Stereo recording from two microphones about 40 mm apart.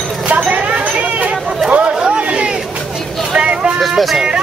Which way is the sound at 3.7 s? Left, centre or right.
Centre.